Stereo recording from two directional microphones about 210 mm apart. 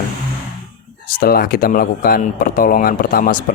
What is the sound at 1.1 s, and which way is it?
Speech, 45° left (ahead or behind).